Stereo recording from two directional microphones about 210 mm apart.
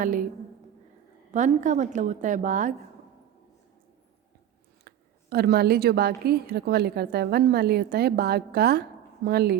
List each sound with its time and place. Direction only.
0.0 s a woman's voice: 40° right (ahead or behind)
1.3 s a woman's voice: 35° right (ahead or behind)
4.9 s a woman's voice: 50° right (ahead or behind)